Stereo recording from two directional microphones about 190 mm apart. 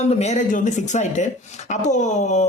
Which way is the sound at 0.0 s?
35° left (ahead or behind).